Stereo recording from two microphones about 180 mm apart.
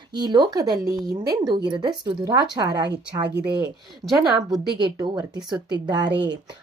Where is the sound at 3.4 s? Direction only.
65° right (ahead or behind).